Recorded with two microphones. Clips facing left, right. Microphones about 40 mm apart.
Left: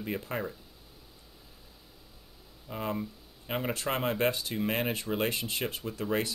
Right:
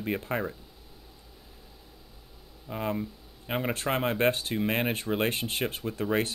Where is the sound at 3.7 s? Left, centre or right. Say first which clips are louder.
Right 2 dB; right.